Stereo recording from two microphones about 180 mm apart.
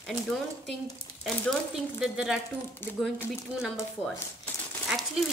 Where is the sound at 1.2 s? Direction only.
Centre (ahead or behind).